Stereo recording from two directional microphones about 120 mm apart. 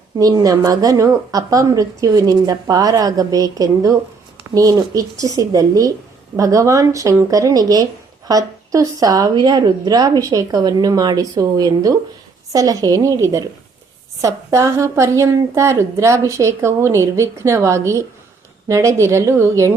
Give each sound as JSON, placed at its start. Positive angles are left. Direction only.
{"t": 0.2, "sound": "a woman's voice", "side_deg": -30}